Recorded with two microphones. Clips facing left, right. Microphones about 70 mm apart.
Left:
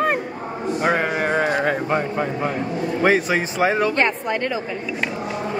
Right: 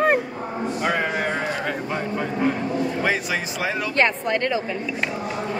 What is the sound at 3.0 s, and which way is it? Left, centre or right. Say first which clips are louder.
Speech: left 6 dB; left.